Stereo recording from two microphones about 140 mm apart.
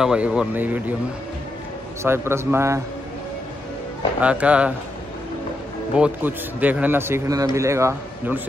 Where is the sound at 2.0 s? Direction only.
15° right (ahead or behind).